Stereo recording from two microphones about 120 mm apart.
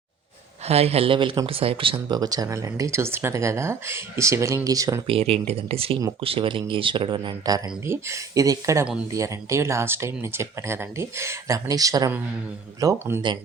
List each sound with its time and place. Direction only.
0.7 s speech: 60° right (ahead or behind)
2.1 s speech: 30° right (ahead or behind)
5.0 s speech: 55° right (ahead or behind); by 7.6 s 35° right (ahead or behind)
7.9 s speech: 25° right (ahead or behind)